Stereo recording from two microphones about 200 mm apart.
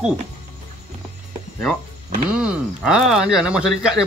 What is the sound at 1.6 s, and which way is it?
Speech, centre (ahead or behind).